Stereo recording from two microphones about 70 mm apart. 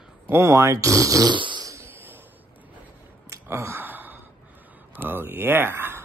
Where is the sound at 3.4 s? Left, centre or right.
Right.